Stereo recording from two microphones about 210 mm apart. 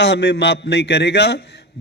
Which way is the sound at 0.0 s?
55° left (ahead or behind).